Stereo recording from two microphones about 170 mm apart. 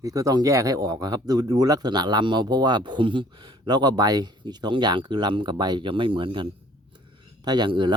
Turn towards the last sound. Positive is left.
turn(degrees=-25)  # may be behind; listen again after turning